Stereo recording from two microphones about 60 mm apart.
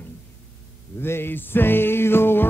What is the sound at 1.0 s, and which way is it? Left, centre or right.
Music, left.